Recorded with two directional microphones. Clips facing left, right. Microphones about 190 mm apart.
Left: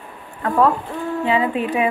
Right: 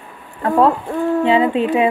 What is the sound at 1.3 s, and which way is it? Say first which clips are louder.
Speech: right 2 dB; 30° right (ahead or behind).